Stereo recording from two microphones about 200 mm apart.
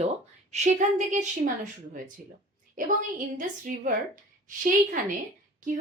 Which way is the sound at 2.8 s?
40° right (ahead or behind).